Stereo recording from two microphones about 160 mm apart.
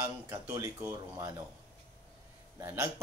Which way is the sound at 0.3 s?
20° right (ahead or behind).